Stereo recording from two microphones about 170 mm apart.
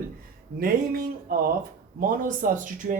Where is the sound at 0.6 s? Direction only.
60° right (ahead or behind).